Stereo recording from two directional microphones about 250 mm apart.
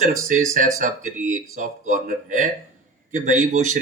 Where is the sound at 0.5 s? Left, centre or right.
Right.